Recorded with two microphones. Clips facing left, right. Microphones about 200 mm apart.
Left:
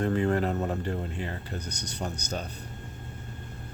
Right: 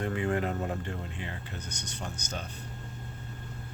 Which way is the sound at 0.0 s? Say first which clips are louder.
Left 4 dB; 40° left (ahead or behind).